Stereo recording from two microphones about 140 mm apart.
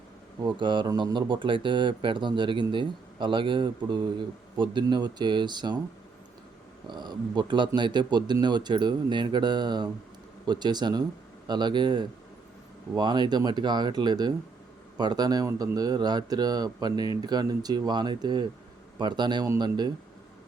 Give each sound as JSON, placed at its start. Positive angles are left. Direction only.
{"t": 0.4, "sound": "speech", "side_deg": -35}
{"t": 6.8, "sound": "speech", "side_deg": -30}